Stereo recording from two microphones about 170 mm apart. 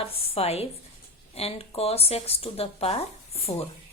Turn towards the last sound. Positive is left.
turn(degrees=35)  # may be behind; listen again after turning